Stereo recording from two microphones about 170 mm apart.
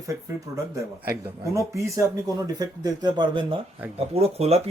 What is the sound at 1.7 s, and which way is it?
Speech, 20° right (ahead or behind).